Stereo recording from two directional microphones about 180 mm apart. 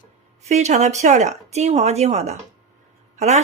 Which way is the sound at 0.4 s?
40° right (ahead or behind).